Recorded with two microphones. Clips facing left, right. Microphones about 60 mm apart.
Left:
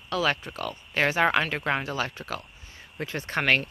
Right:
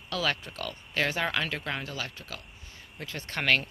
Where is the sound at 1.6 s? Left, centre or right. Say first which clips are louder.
Left 7 dB; left.